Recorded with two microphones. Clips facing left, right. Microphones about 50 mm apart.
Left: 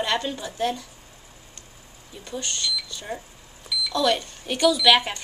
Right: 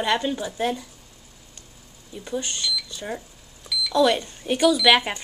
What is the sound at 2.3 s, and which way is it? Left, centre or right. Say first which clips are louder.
Speech: right 2 dB; centre.